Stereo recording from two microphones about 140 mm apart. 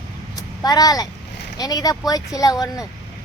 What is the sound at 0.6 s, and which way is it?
Speech, 25° left (ahead or behind).